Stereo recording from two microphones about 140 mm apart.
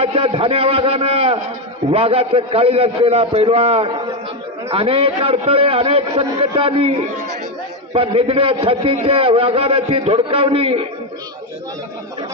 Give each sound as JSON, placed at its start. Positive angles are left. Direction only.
{"t": 0.0, "sound": "a man's voice", "side_deg": -45}
{"t": 7.9, "sound": "a man's voice", "side_deg": -45}